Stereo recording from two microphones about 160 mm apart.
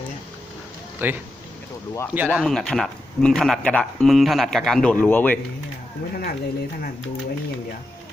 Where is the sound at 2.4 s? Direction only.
5° left (ahead or behind).